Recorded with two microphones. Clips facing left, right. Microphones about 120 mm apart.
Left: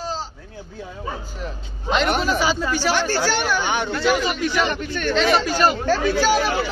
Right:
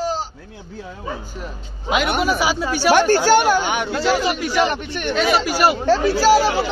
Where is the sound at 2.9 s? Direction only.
55° right (ahead or behind).